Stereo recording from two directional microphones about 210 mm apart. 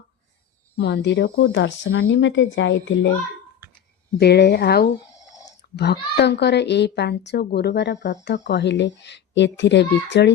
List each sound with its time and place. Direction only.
0.8 s speech: 55° left (ahead or behind)
4.2 s speech: 50° left (ahead or behind)